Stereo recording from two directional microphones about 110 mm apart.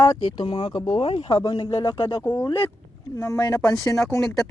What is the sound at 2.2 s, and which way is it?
Speech, 20° left (ahead or behind).